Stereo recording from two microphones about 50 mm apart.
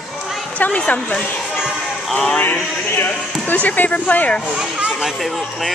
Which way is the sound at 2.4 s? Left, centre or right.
Left.